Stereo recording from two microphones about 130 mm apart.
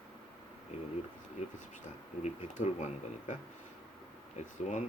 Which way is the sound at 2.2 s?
65° left (ahead or behind).